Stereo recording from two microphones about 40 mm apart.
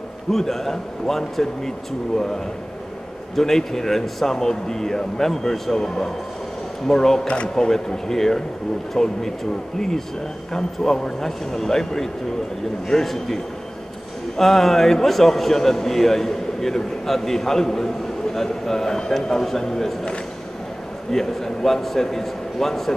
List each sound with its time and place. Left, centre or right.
0.3 s a man's voice: centre
3.3 s a man's voice: centre
7.2 s speech: left
7.5 s a man's voice: centre
21.1 s a man's voice: centre